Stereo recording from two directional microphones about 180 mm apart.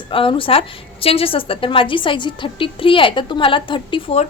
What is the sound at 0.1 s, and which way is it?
A woman's voice, 30° left (ahead or behind).